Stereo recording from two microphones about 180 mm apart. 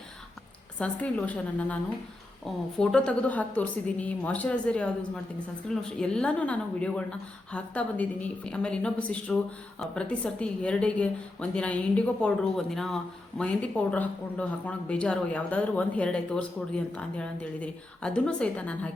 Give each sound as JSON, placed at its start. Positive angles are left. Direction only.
{"t": 0.8, "sound": "a woman's voice", "side_deg": 10}